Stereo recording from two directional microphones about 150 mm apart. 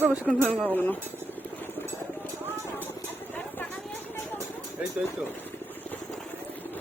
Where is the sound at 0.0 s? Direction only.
10° right (ahead or behind).